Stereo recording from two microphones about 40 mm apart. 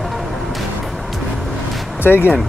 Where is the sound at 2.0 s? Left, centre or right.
Left.